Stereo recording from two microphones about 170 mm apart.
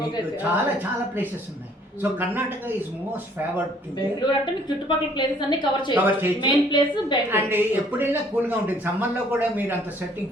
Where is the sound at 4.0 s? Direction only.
25° left (ahead or behind).